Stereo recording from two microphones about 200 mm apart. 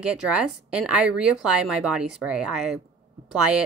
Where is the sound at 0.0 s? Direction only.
5° right (ahead or behind).